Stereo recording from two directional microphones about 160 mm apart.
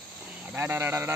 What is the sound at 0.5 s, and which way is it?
Speech, 15° right (ahead or behind).